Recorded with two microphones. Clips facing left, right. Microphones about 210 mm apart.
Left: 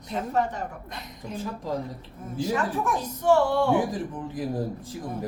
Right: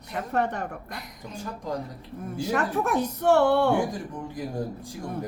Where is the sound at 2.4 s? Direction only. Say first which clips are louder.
Even; 65° right (ahead or behind).